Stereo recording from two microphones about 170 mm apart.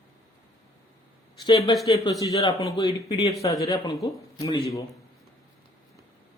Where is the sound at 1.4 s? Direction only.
25° left (ahead or behind).